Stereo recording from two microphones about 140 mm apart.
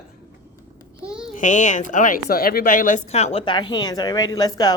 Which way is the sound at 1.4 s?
65° left (ahead or behind).